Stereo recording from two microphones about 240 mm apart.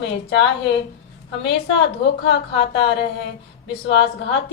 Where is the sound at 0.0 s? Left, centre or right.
Left.